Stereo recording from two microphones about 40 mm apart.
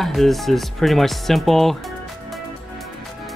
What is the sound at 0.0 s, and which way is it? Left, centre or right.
Music, centre.